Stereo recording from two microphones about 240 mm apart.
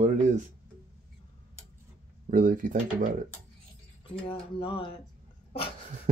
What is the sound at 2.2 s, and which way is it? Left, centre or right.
Speech, right.